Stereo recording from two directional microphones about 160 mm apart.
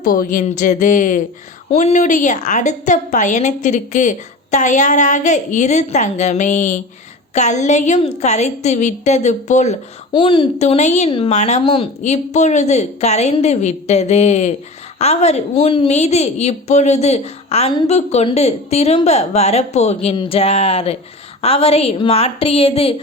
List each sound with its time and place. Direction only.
0.0 s speech: 65° left (ahead or behind); by 9.7 s 45° left (ahead or behind)
10.1 s a woman's voice: 30° left (ahead or behind)